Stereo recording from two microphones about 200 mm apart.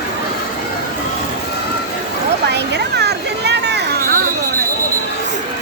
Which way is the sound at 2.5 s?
55° right (ahead or behind).